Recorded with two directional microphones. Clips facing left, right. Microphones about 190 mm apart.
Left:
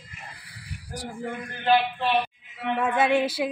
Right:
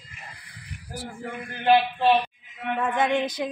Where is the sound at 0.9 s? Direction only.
15° left (ahead or behind).